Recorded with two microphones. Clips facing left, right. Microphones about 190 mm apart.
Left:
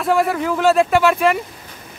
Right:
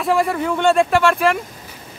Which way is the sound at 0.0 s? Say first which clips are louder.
Left 1 dB; centre (ahead or behind).